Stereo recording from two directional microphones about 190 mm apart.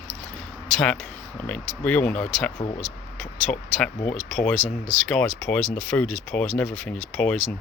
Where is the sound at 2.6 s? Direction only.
30° left (ahead or behind).